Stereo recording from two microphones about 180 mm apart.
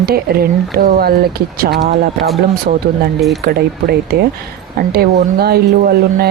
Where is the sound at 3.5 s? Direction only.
60° right (ahead or behind).